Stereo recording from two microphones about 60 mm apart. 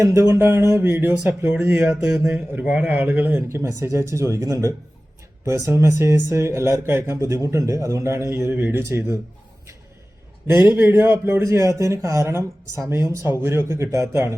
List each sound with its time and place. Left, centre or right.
0.0 s speech: right
1.7 s speech: right
3.5 s speech: right
7.2 s speech: right
10.4 s a man's voice: right
11.4 s speech: right